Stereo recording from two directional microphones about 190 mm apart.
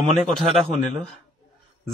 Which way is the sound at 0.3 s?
Centre (ahead or behind).